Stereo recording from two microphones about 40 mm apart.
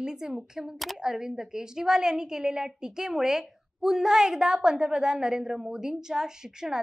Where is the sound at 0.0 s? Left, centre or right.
Centre.